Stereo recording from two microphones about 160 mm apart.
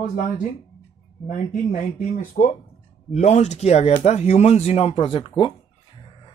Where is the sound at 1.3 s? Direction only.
55° left (ahead or behind).